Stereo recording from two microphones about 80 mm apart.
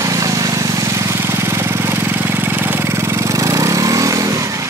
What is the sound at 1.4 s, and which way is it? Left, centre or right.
Vehicle, right.